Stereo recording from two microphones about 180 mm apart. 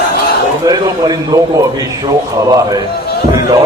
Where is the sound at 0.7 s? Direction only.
20° right (ahead or behind).